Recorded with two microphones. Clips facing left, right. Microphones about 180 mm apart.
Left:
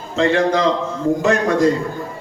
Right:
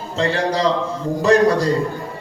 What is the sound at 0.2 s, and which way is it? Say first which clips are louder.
A man's voice: left 3 dB; 35° right (ahead or behind).